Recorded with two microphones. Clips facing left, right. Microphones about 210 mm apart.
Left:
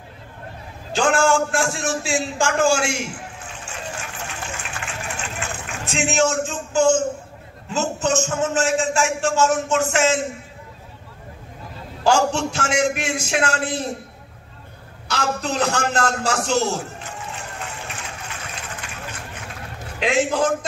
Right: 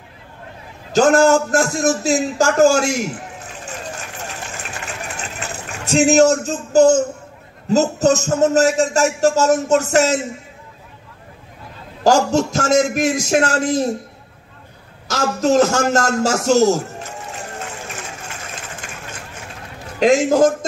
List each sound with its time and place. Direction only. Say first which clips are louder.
0.9 s a man's voice: right 6 dB; 40° right (ahead or behind)
5.9 s a man's voice: right 8 dB; 40° right (ahead or behind)
12.0 s a man's voice: right 4 dB; 40° right (ahead or behind)
15.0 s a man's voice: right 7 dB; 45° right (ahead or behind)
17.4 s music: right 3 dB; 45° right (ahead or behind)
18.5 s vehicle: right 1 dB; 45° right (ahead or behind)
20.0 s a man's voice: right 7 dB; 45° right (ahead or behind)